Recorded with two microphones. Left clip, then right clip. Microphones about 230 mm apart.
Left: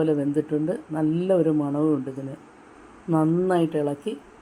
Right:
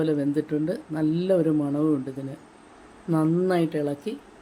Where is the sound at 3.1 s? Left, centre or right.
Centre.